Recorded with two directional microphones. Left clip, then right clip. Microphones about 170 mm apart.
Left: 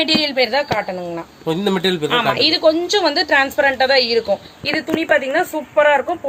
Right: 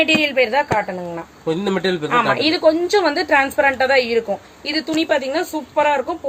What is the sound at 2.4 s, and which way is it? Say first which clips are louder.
A woman's voice: left 1 dB; 15° right (ahead or behind).